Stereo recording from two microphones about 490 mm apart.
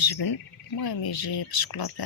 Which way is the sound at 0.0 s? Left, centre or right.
Left.